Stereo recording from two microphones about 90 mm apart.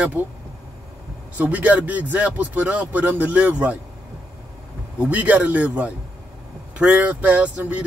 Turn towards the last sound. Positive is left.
turn(degrees=-15)  # may be behind; listen again after turning